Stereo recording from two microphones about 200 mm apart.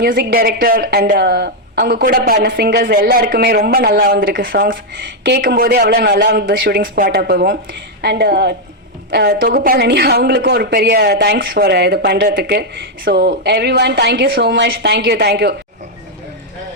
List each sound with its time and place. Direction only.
0.0 s a woman's voice: 50° right (ahead or behind)